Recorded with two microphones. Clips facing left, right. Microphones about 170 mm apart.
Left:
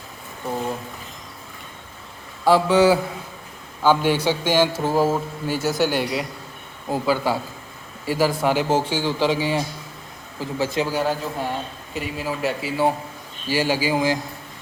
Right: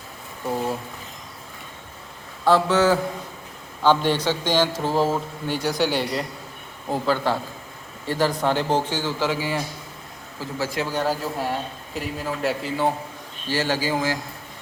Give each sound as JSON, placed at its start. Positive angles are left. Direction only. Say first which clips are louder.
{"t": 2.4, "sound": "a man's voice", "louder": "left 2 dB", "side_deg": 10}
{"t": 10.9, "sound": "a man's voice", "louder": "left 1 dB", "side_deg": 0}